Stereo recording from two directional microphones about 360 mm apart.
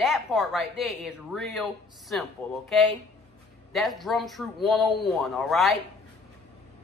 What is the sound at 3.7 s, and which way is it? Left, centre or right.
Speech, centre.